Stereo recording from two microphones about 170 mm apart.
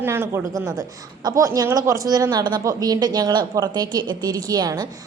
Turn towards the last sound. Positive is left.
turn(degrees=-25)  # may be behind; listen again after turning